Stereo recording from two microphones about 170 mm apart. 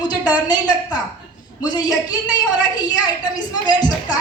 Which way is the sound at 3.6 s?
25° left (ahead or behind).